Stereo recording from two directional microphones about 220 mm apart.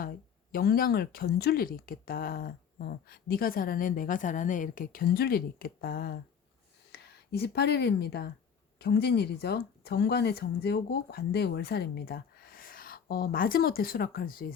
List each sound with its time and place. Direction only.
0.5 s speech: 45° left (ahead or behind)